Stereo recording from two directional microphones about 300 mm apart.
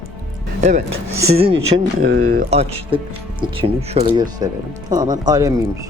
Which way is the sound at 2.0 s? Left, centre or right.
Right.